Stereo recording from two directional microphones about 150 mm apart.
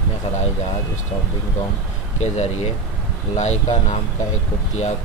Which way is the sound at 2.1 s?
50° left (ahead or behind).